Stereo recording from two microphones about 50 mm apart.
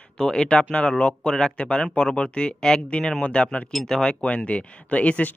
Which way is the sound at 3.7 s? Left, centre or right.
Centre.